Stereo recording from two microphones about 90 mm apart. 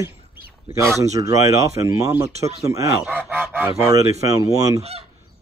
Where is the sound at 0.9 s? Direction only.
35° right (ahead or behind).